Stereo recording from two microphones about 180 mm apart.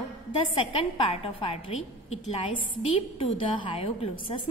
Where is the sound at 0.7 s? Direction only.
35° left (ahead or behind).